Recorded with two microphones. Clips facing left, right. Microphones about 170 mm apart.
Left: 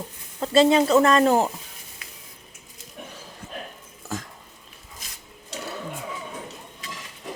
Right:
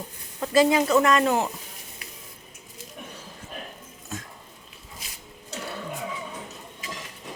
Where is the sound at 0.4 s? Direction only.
25° left (ahead or behind).